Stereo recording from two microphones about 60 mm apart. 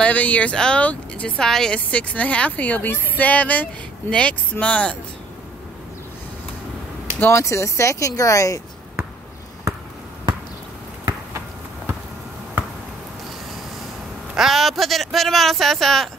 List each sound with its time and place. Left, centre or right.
0.0 s speech: left; by 1.8 s centre
1.9 s speech: left
7.2 s speech: left
7.4 s speech: left
14.3 s speech: centre